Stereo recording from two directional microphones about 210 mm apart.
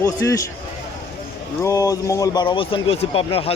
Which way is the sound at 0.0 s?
15° left (ahead or behind).